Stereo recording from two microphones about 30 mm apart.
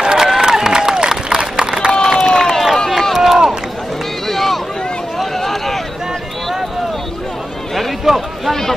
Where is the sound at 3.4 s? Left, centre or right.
Centre.